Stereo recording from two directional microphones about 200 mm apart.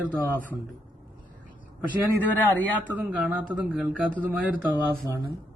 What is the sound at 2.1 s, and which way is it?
Speech, 10° left (ahead or behind).